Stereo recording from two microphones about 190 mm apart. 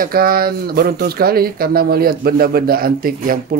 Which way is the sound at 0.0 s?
50° right (ahead or behind).